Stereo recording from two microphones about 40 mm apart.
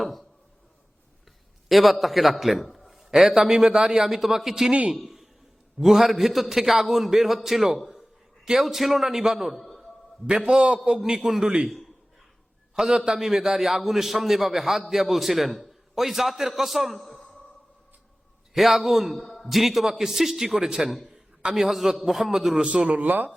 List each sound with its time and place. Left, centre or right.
0.0 s a sound: centre
1.6 s a man's voice: centre
4.9 s a sound: centre
5.8 s a man's voice: centre
10.2 s a man's voice: right
10.8 s a man's voice: centre
12.7 s a man's voice: centre
18.5 s a man's voice: centre
20.6 s a man's voice: right
21.5 s a man's voice: centre
23.0 s speech: right